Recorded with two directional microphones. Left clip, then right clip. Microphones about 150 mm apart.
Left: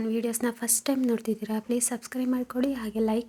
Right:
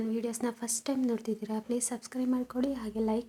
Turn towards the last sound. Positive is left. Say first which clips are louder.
# left 4 dB
turn(degrees=20)  # may be behind; listen again after turning